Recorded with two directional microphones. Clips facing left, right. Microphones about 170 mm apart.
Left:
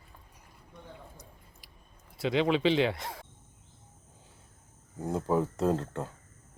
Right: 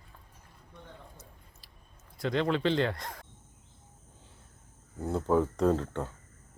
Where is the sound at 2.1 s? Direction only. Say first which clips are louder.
Left 2 dB; 10° left (ahead or behind).